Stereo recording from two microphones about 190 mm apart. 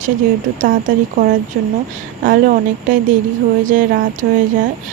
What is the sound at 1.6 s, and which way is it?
Speech, 60° right (ahead or behind).